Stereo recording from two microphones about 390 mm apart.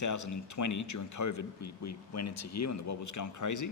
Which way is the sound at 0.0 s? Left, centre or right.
Left.